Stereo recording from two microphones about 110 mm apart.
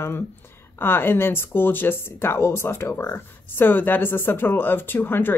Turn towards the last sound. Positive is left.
turn(degrees=20)  # may be behind; listen again after turning